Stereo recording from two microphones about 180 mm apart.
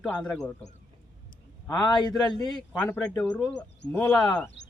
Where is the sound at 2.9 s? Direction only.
5° left (ahead or behind).